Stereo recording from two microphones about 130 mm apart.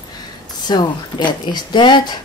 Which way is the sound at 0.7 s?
35° left (ahead or behind).